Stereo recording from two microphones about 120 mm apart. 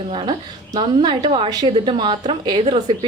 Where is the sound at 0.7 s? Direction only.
35° right (ahead or behind).